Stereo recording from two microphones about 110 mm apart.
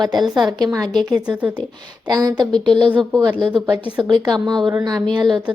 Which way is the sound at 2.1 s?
35° right (ahead or behind).